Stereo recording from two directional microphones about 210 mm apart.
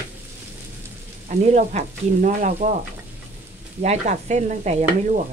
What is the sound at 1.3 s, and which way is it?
Frying, 35° right (ahead or behind).